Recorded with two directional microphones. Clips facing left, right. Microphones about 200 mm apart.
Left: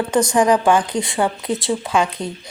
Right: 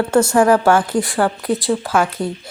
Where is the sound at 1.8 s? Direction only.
20° left (ahead or behind).